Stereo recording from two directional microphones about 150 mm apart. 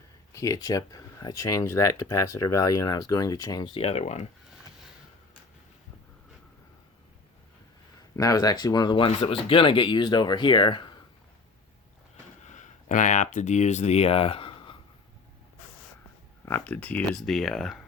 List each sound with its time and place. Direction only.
0.3 s speech: 25° left (ahead or behind)
3.8 s speech: 40° left (ahead or behind)
8.1 s speech: 25° left (ahead or behind)
12.5 s speech: 55° left (ahead or behind); by 14.8 s 40° left (ahead or behind)
16.5 s speech: 10° left (ahead or behind)